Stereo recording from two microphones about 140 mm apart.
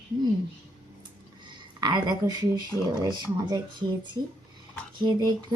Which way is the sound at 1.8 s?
30° right (ahead or behind).